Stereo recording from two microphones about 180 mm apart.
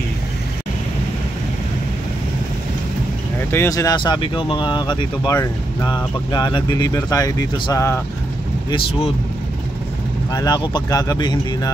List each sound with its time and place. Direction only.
3.5 s speech: 15° left (ahead or behind)
10.3 s speech: 20° left (ahead or behind)